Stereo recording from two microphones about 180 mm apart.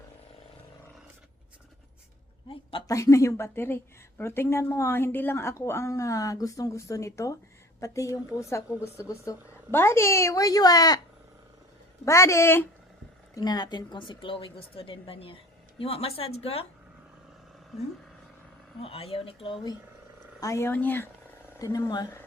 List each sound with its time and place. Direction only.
2.5 s speech: 30° left (ahead or behind)
2.9 s a woman's voice: 15° left (ahead or behind)
12.0 s a woman's voice: 15° left (ahead or behind); by 16.6 s 35° left (ahead or behind)
18.8 s speech: 35° left (ahead or behind)
20.4 s a woman's voice: 15° left (ahead or behind)